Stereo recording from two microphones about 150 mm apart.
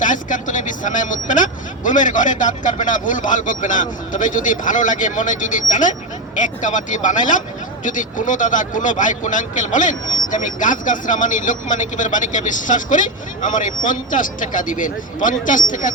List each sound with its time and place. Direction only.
0.0 s speech: 60° left (ahead or behind)